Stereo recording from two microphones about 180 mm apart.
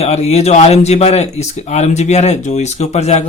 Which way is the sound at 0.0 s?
35° left (ahead or behind).